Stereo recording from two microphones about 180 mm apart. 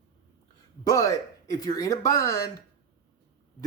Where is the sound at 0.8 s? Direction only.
20° left (ahead or behind).